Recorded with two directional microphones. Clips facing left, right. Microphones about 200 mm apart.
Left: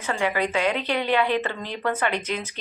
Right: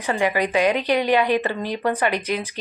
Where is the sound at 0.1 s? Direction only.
15° right (ahead or behind).